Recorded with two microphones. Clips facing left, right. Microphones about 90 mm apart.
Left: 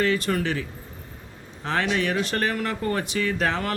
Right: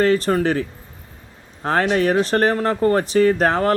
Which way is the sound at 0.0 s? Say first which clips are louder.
Right 7 dB; 40° right (ahead or behind).